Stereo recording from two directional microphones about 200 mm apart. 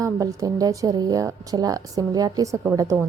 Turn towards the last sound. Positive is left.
turn(degrees=-15)  # may be behind; listen again after turning